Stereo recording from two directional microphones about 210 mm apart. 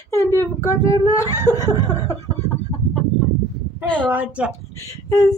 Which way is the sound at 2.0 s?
15° left (ahead or behind).